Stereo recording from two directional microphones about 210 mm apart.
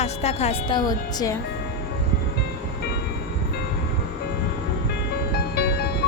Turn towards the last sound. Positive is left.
turn(degrees=50)  # may be behind; listen again after turning